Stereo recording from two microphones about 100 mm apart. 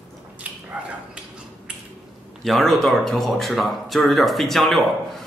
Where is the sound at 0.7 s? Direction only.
15° right (ahead or behind).